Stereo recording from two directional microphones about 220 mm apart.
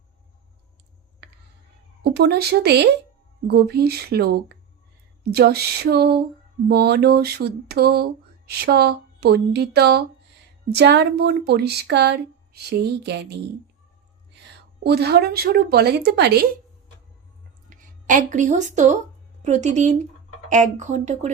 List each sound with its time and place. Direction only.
2.0 s a woman's voice: 45° right (ahead or behind)
14.8 s a woman's voice: 45° right (ahead or behind)
17.7 s speech: 35° right (ahead or behind)